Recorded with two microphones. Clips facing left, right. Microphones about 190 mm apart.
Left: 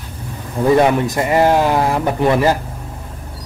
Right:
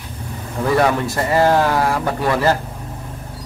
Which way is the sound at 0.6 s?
20° left (ahead or behind).